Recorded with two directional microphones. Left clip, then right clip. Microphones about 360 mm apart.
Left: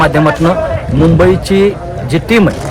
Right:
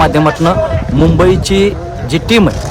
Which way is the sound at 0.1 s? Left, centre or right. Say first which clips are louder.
Left 1 dB; right.